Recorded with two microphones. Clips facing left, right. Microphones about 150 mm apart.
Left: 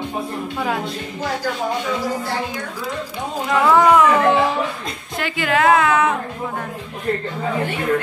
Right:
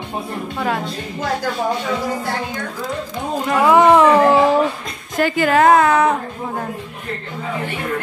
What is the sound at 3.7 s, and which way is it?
Speech, 25° right (ahead or behind).